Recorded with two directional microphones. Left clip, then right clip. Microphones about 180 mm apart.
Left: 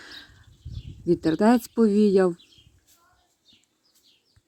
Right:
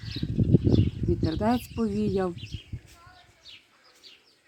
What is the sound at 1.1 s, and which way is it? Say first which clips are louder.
Speech: left 7 dB; 20° left (ahead or behind).